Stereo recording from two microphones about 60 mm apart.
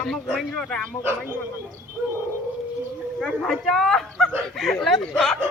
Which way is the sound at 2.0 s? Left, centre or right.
Right.